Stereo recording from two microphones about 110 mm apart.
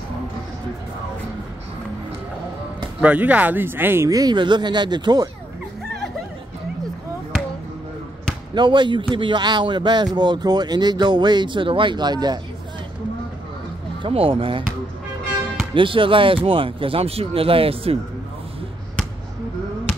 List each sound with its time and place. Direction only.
3.0 s speech: 10° right (ahead or behind)
4.1 s speech: 40° right (ahead or behind)
8.5 s speech: 45° right (ahead or behind)
14.0 s speech: 55° right (ahead or behind)
15.7 s speech: 50° right (ahead or behind)